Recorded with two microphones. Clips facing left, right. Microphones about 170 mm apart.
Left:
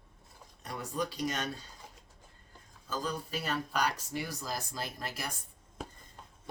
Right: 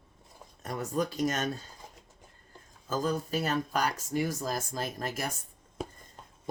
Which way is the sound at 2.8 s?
45° right (ahead or behind).